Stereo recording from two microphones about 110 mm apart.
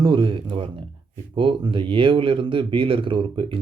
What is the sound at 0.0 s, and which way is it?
Speech, 50° right (ahead or behind).